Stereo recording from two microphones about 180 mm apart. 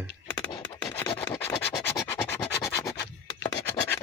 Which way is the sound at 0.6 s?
10° left (ahead or behind).